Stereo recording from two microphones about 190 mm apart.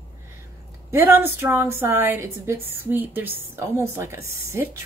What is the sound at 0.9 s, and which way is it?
A woman's voice, 10° right (ahead or behind).